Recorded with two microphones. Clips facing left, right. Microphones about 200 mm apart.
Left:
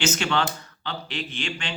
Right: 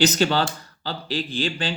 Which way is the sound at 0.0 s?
35° right (ahead or behind).